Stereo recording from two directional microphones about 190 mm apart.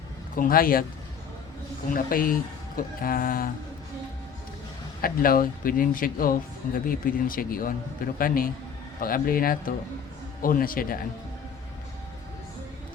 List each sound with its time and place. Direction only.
0.3 s speech: 50° left (ahead or behind)
1.9 s speech: 50° left (ahead or behind)
5.0 s speech: 50° left (ahead or behind)